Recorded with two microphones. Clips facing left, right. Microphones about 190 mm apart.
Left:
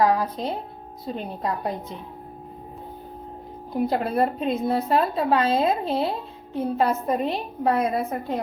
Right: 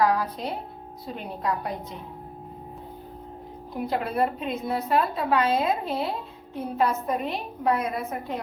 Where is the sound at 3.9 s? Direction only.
35° left (ahead or behind).